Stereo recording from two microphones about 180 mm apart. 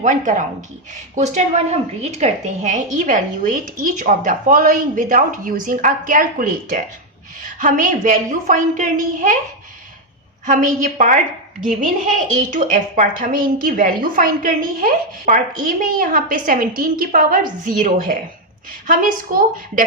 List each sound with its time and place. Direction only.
0.0 s a woman's voice: 45° right (ahead or behind)
10.4 s a woman's voice: 45° right (ahead or behind)
12.5 s a woman's voice: 45° right (ahead or behind)